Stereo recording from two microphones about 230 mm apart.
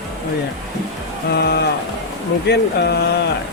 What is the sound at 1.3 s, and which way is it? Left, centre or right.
Speech, left.